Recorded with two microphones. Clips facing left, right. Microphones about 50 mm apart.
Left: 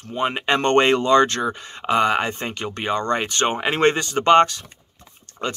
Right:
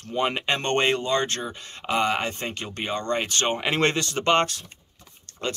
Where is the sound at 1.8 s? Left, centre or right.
Left.